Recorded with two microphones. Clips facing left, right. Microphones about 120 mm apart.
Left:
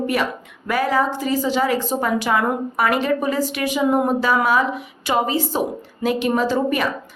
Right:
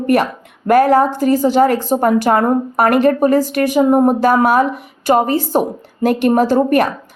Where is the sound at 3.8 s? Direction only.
35° right (ahead or behind).